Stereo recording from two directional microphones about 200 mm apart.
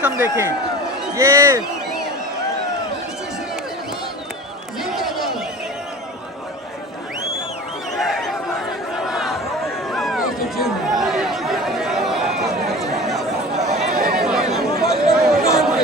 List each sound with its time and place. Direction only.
0.0 s a man's voice: 10° right (ahead or behind)
4.8 s crowd: centre (ahead or behind)
7.9 s a sound: centre (ahead or behind)
9.9 s chatter: centre (ahead or behind)
13.7 s a sound: 50° right (ahead or behind)
14.2 s chatter: centre (ahead or behind)
14.6 s chatter: 50° right (ahead or behind)
15.1 s chatter: centre (ahead or behind)